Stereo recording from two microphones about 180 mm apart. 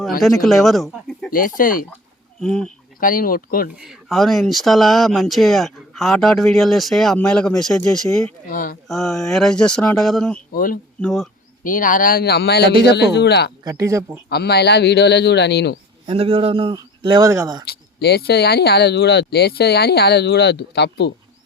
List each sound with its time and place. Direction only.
0.2 s speech: centre (ahead or behind)
1.3 s speech: 50° left (ahead or behind)
2.4 s speech: 5° left (ahead or behind)
3.0 s speech: 50° left (ahead or behind)
3.8 s speech: centre (ahead or behind)
8.4 s speech: 50° left (ahead or behind)
8.9 s speech: centre (ahead or behind)
10.5 s speech: 50° left (ahead or behind)
11.0 s speech: centre (ahead or behind)
11.6 s a man's voice: 50° left (ahead or behind); by 13.5 s 65° left (ahead or behind)
13.7 s speech: 15° right (ahead or behind)
14.3 s a man's voice: 65° left (ahead or behind)
16.0 s a man's voice: 30° right (ahead or behind)
17.7 s speech: 60° left (ahead or behind)